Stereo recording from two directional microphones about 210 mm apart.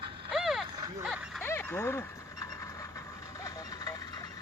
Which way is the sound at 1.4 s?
10° left (ahead or behind).